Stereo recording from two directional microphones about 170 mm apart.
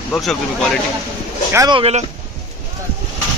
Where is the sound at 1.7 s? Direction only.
40° right (ahead or behind).